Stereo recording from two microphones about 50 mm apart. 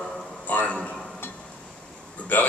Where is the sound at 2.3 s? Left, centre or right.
Left.